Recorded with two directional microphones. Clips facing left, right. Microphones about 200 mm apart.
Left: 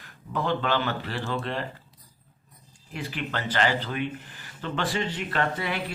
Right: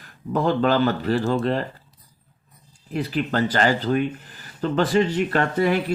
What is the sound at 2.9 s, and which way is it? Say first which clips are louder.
Speech: right 9 dB; 35° right (ahead or behind).